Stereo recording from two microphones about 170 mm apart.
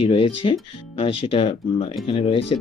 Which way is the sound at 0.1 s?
30° left (ahead or behind).